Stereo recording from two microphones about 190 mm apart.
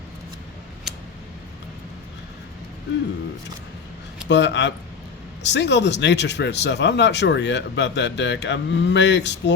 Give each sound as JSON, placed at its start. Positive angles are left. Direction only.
{"t": 4.3, "sound": "speech", "side_deg": 70}